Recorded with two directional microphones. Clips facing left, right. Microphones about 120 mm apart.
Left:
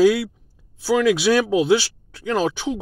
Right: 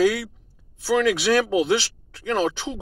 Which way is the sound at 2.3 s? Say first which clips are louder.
Left 2 dB; 10° left (ahead or behind).